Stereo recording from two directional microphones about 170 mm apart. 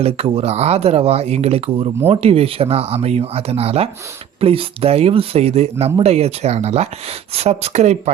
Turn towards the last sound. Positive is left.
turn(degrees=-40)  # may be behind; listen again after turning